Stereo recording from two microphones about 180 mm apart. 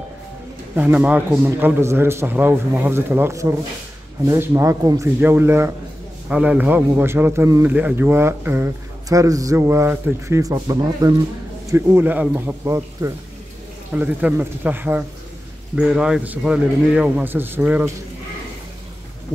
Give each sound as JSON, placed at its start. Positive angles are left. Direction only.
{"t": 0.7, "sound": "a man's voice", "side_deg": -10}